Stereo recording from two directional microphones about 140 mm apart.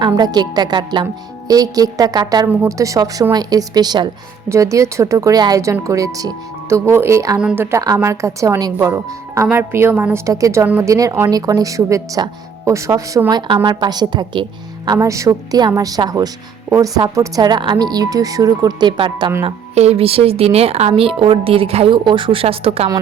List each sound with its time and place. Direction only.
0.0 s a woman's voice: 30° right (ahead or behind)
14.9 s a woman's voice: 20° right (ahead or behind)
19.5 s speech: 50° right (ahead or behind)